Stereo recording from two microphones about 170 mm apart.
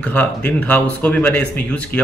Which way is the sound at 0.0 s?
10° left (ahead or behind).